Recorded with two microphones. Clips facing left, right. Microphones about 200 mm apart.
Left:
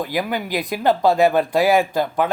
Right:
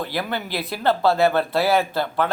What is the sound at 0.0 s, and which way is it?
Speech, 15° left (ahead or behind).